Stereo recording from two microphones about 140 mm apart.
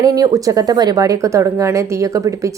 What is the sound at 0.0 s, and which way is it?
Speech, 25° right (ahead or behind).